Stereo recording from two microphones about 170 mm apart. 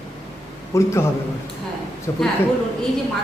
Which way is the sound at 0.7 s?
15° left (ahead or behind).